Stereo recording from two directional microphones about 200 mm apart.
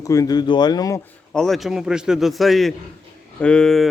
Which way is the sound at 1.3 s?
Centre (ahead or behind).